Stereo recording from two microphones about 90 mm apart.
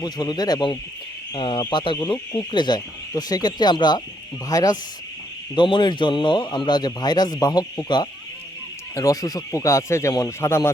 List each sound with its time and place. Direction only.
0.0 s speech: 50° left (ahead or behind)
2.1 s speech: 30° left (ahead or behind)
2.5 s speech: 55° left (ahead or behind)
5.5 s speech: 60° left (ahead or behind)
9.0 s speech: 40° left (ahead or behind)